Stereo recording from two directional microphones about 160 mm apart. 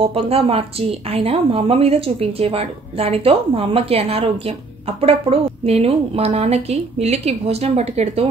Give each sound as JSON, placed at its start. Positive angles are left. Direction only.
{"t": 0.1, "sound": "a woman's voice", "side_deg": -35}